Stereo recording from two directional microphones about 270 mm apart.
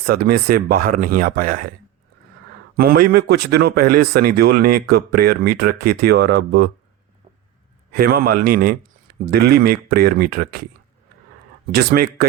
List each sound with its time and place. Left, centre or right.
0.0 s speech: right
2.7 s speech: right
7.9 s speech: right
11.7 s speech: right